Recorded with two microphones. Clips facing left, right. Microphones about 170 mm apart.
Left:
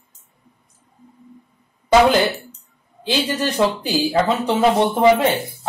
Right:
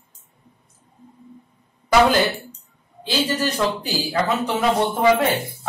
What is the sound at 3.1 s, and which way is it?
Speech, 15° left (ahead or behind).